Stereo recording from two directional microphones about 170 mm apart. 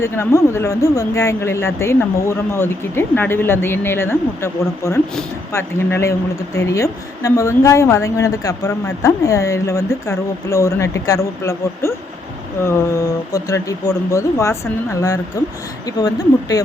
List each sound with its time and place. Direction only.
0.0 s speech: 15° left (ahead or behind)